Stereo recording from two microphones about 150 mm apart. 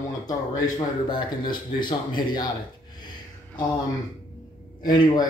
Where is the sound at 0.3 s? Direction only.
25° left (ahead or behind).